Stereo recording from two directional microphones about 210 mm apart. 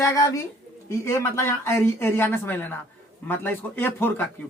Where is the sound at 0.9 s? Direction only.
15° left (ahead or behind).